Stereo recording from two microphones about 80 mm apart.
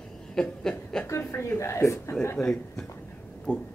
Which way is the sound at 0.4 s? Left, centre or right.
Centre.